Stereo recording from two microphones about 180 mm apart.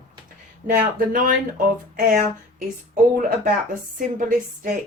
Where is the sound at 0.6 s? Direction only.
50° right (ahead or behind).